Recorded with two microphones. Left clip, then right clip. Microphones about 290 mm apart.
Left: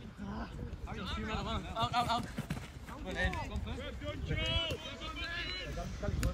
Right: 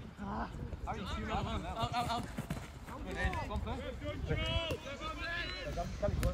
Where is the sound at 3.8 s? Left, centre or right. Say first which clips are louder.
Right 1 dB; centre.